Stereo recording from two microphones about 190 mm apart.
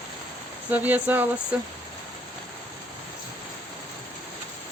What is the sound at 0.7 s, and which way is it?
Speech, 10° right (ahead or behind).